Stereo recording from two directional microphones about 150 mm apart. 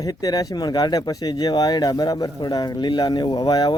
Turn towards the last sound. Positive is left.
turn(degrees=25)  # may be behind; listen again after turning